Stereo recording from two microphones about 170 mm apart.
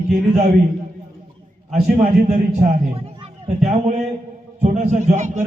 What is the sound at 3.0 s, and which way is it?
A man's voice, 40° right (ahead or behind).